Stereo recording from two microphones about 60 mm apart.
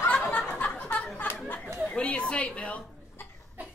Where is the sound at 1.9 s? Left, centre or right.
Centre.